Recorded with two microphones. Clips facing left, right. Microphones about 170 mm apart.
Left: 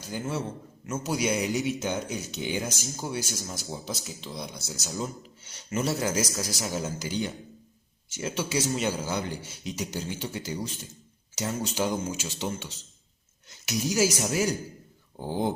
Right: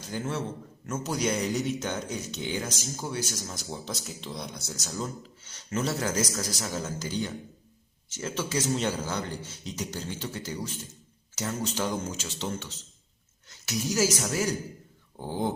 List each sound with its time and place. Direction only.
0.1 s speech: 5° left (ahead or behind)